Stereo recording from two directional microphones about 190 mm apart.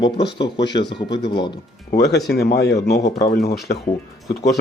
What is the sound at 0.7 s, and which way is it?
Speech, 65° left (ahead or behind).